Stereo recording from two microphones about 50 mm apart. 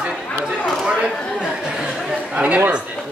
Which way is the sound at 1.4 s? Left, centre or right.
Centre.